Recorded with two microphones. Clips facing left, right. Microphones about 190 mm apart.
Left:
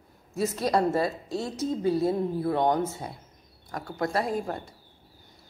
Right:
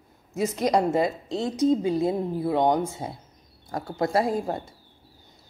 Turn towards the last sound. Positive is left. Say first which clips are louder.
# right 3 dB
turn(degrees=-20)  # may be behind; listen again after turning